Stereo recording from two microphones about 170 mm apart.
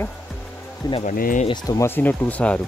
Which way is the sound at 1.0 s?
55° left (ahead or behind).